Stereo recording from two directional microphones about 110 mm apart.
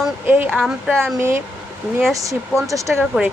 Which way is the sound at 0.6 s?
5° right (ahead or behind).